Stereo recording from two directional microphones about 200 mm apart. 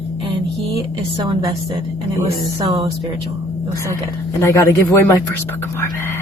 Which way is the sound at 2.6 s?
30° right (ahead or behind).